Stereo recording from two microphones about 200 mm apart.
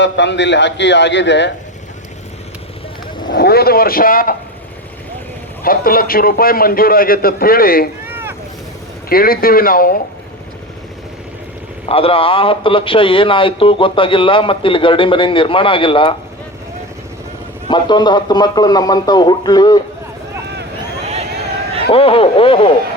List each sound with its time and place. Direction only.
0.0 s a man's voice: 60° left (ahead or behind)
3.2 s a man's voice: 50° left (ahead or behind)
5.6 s a man's voice: 45° left (ahead or behind)
8.0 s boat: 10° right (ahead or behind)
9.0 s a man's voice: 45° left (ahead or behind)
11.9 s a man's voice: 30° left (ahead or behind)
17.7 s a man's voice: 20° left (ahead or behind)
21.9 s a man's voice: 25° left (ahead or behind)